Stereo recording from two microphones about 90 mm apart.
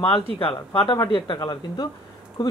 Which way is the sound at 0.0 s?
85° left.